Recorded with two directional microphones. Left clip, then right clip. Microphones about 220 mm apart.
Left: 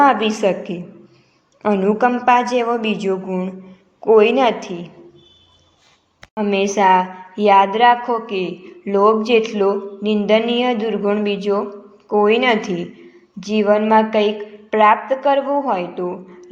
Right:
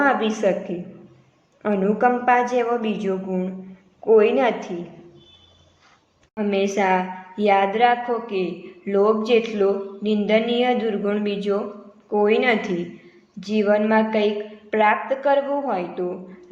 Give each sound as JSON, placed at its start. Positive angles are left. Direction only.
{"t": 0.0, "sound": "a woman's voice", "side_deg": 25}
{"t": 1.6, "sound": "a woman's voice", "side_deg": 25}
{"t": 6.3, "sound": "a woman's voice", "side_deg": 25}